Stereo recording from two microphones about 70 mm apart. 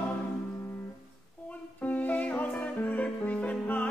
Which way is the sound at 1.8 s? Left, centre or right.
Left.